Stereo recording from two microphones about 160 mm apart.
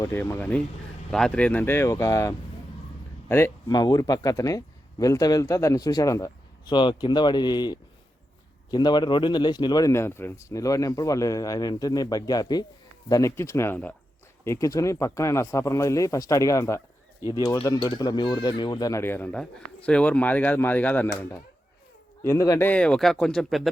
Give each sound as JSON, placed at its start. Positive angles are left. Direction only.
{"t": 0.0, "sound": "speech", "side_deg": 15}
{"t": 22.2, "sound": "speech", "side_deg": 20}